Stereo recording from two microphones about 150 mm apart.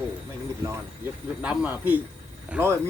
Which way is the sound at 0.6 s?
20° right (ahead or behind).